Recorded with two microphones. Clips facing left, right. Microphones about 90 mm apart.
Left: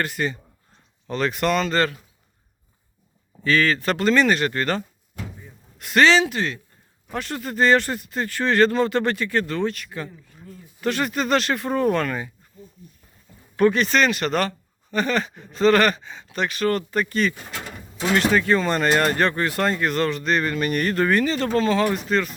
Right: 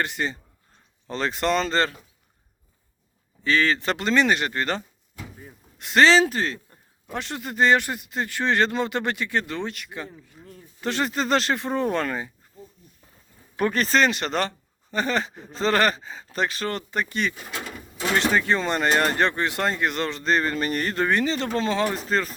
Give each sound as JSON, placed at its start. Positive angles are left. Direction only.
{"t": 0.0, "sound": "speech", "side_deg": -25}
{"t": 3.4, "sound": "speech", "side_deg": -25}
{"t": 5.8, "sound": "speech", "side_deg": -25}
{"t": 7.1, "sound": "speech", "side_deg": -20}
{"t": 12.5, "sound": "a sound", "side_deg": -30}
{"t": 13.7, "sound": "speech", "side_deg": -35}